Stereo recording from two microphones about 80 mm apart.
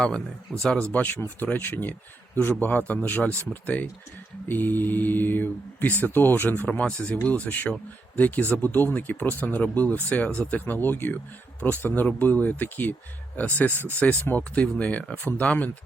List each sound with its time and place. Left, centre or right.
0.6 s speech: centre